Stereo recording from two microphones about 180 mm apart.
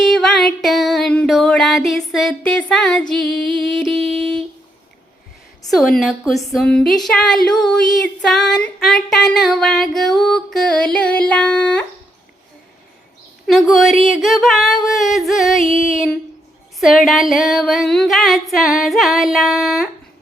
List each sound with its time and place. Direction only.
0.0 s a woman's voice: centre (ahead or behind)
5.7 s a woman's voice: centre (ahead or behind)
13.5 s a woman's voice: centre (ahead or behind)